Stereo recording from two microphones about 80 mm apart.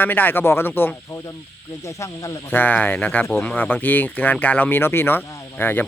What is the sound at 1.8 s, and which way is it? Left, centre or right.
Speech, left.